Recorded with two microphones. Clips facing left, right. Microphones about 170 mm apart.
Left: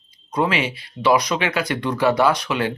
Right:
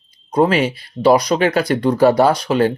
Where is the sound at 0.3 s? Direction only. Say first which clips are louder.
Right 6 dB; 40° right (ahead or behind).